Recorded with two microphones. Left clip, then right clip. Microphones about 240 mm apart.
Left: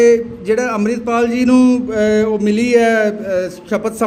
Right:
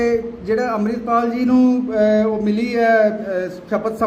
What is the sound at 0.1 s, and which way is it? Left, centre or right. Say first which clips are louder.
A man's voice: left 6 dB; left.